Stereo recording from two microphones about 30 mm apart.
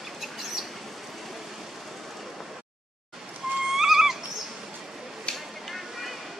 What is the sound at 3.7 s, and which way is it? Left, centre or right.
Music, centre.